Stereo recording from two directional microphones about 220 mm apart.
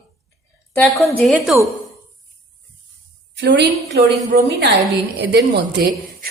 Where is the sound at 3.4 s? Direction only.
50° right (ahead or behind).